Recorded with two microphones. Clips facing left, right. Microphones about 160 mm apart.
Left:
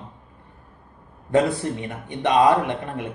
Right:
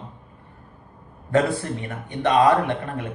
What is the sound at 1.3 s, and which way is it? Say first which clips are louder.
A man's voice: left 1 dB; 20° left (ahead or behind).